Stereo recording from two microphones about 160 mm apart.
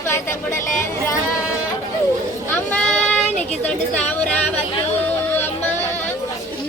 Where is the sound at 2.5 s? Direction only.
10° left (ahead or behind).